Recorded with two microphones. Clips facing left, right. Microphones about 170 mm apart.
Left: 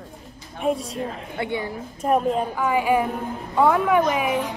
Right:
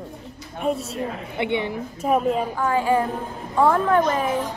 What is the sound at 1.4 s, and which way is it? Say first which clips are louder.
Speech: right 3 dB; 25° right (ahead or behind).